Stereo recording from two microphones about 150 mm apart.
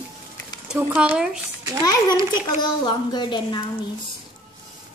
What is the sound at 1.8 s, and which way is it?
A child's voice, 25° left (ahead or behind).